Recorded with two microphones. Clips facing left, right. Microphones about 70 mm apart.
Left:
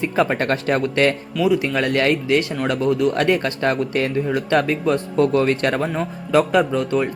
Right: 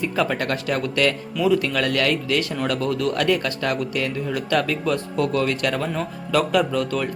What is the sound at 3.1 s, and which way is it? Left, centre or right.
Speech, left.